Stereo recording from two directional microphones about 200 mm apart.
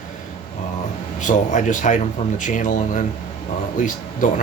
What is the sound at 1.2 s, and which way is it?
Speech, 40° left (ahead or behind).